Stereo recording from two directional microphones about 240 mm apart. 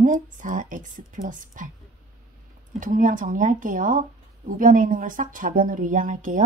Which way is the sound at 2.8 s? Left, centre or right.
Right.